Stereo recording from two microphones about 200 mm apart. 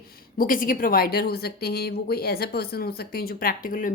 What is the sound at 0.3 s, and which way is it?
A woman's voice, 45° left (ahead or behind).